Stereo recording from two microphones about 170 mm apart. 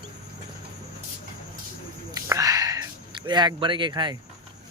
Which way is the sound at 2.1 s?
20° right (ahead or behind).